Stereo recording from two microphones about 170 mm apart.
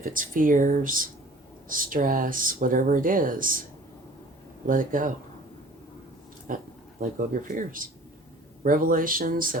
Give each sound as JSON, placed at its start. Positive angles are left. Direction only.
{"t": 0.0, "sound": "speech", "side_deg": -55}
{"t": 4.6, "sound": "speech", "side_deg": -50}
{"t": 6.5, "sound": "speech", "side_deg": -50}